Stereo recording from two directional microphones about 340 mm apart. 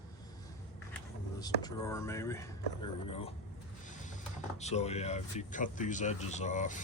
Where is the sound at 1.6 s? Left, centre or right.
Centre.